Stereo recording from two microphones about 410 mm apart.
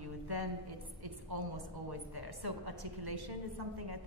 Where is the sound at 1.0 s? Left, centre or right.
Right.